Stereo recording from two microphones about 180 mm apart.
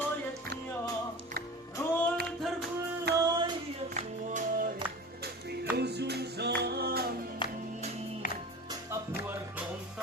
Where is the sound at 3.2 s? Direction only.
25° right (ahead or behind).